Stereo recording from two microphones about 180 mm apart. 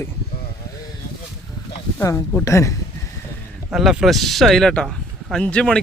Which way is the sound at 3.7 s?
Centre (ahead or behind).